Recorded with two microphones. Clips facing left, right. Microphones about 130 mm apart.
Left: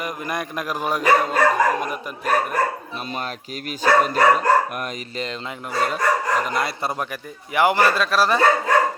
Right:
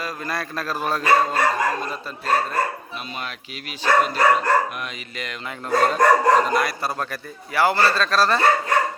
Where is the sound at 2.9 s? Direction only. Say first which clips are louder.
Left 3 dB; 40° left (ahead or behind).